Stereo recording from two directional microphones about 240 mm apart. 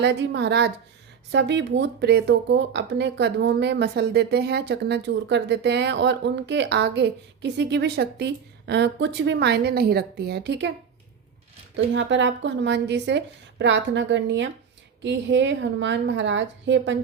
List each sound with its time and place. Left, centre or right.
0.0 s speech: right
11.9 s speech: right